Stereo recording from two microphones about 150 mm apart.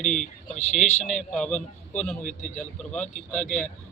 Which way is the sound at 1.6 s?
55° left (ahead or behind).